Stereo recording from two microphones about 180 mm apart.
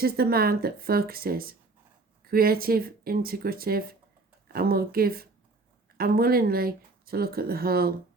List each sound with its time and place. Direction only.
0.0 s speech: 55° right (ahead or behind)